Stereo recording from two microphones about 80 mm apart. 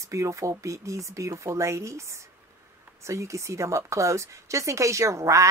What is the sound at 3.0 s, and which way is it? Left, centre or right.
A woman's voice, right.